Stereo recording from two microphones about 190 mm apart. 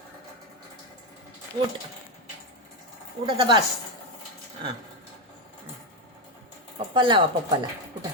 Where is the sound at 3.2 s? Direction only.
25° right (ahead or behind).